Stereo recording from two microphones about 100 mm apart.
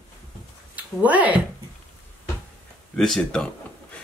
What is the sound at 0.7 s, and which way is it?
Speech, 15° right (ahead or behind).